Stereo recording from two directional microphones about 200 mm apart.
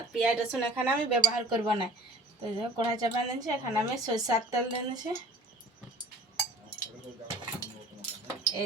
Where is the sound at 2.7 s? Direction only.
20° right (ahead or behind).